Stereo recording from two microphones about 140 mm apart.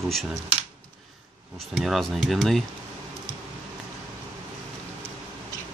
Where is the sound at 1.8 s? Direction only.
Centre (ahead or behind).